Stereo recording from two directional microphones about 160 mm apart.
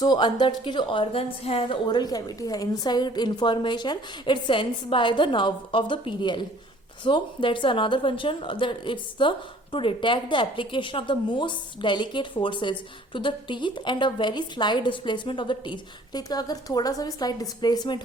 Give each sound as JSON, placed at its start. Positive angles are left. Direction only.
{"t": 0.0, "sound": "a woman's voice", "side_deg": 25}